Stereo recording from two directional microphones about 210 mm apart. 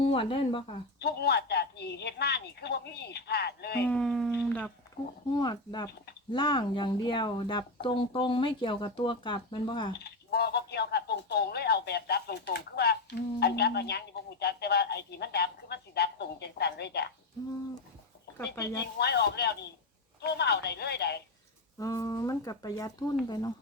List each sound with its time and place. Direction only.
0.0 s speech: 25° left (ahead or behind)
0.9 s speech: 50° left (ahead or behind)
3.8 s speech: 5° left (ahead or behind)
5.4 s speech: 20° left (ahead or behind)
10.0 s speech: 50° left (ahead or behind)
18.3 s speech: 15° left (ahead or behind)
18.9 s speech: 50° left (ahead or behind)
21.8 s speech: 15° left (ahead or behind)